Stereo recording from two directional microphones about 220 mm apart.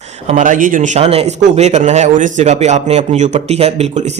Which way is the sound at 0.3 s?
35° right (ahead or behind).